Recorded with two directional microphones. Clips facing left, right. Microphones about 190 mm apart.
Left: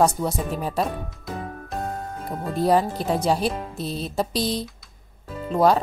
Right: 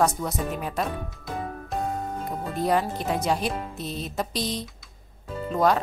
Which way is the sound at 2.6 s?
35° left (ahead or behind).